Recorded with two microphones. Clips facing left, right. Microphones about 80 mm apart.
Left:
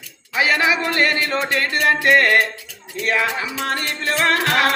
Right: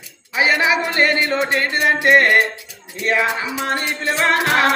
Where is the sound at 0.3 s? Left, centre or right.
Centre.